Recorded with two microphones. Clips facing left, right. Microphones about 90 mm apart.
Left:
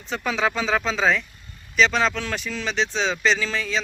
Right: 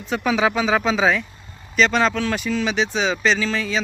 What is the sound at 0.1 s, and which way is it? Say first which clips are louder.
Speech: right 4 dB; 5° right (ahead or behind).